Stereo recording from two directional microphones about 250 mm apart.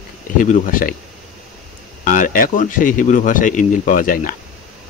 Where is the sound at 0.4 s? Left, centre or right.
Left.